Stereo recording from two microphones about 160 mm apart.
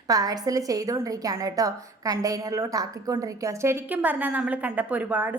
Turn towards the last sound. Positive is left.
turn(degrees=-10)  # may be behind; listen again after turning